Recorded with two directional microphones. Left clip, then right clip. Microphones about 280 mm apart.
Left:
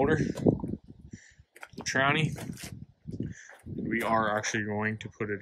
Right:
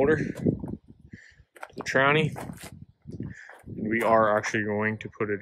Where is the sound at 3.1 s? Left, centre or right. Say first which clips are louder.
Even; centre.